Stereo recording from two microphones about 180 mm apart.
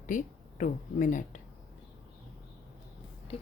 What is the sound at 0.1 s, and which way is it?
Speech, 45° left (ahead or behind).